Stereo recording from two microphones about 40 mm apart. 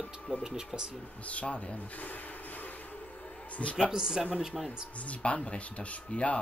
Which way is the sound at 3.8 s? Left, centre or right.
Centre.